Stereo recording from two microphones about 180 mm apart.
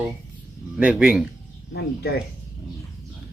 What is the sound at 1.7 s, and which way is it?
Speech, 60° left (ahead or behind).